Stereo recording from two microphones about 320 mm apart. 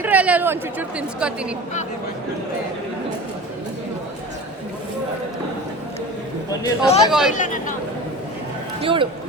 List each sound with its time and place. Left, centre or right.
0.0 s speech: centre
6.5 s speech: centre
7.1 s speech: centre
7.3 s speech: left
8.8 s a man's voice: centre